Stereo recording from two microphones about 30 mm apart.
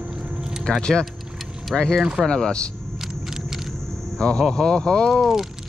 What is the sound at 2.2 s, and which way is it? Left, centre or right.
Speech, left.